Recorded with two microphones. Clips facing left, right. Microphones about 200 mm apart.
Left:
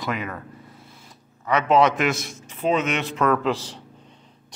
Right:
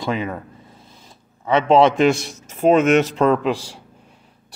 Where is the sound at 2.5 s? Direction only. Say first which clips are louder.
Right 8 dB; 50° right (ahead or behind).